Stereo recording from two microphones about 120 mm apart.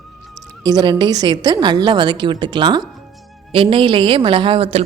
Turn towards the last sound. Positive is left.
turn(degrees=-50)  # may be behind; listen again after turning